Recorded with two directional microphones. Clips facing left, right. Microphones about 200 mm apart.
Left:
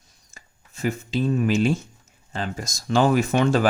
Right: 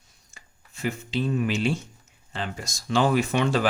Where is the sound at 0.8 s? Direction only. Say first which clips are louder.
Left 3 dB; 45° left (ahead or behind).